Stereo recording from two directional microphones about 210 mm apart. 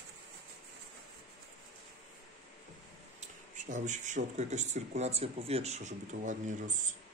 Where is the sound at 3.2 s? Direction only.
35° right (ahead or behind).